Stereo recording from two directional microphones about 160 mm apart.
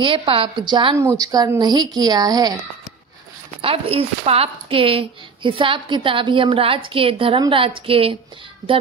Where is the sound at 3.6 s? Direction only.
35° right (ahead or behind).